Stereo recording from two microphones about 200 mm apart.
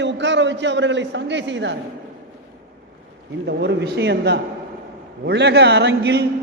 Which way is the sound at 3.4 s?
55° right (ahead or behind).